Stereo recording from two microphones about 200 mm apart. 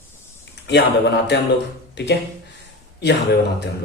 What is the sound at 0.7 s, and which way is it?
Speech, 60° left (ahead or behind).